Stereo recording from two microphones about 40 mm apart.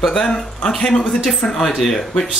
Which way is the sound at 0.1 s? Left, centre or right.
Centre.